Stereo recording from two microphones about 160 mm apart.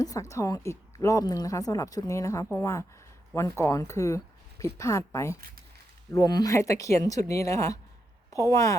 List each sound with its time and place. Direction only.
0.0 s a woman's voice: 20° left (ahead or behind)